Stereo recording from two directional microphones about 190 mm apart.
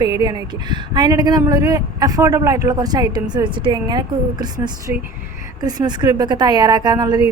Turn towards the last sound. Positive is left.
turn(degrees=-20)  # may be behind; listen again after turning